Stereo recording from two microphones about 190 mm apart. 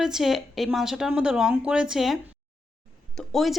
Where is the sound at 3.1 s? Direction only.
Centre (ahead or behind).